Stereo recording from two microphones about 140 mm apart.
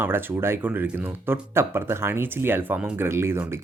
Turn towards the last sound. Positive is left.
turn(degrees=-20)  # may be behind; listen again after turning